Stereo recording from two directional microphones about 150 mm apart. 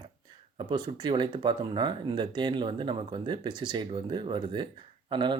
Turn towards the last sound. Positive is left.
turn(degrees=-30)  # may be behind; listen again after turning